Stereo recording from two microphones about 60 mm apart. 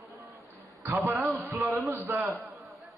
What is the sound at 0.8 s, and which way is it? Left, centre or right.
Speech, right.